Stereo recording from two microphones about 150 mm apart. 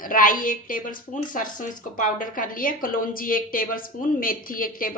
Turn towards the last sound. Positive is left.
turn(degrees=70)  # may be behind; listen again after turning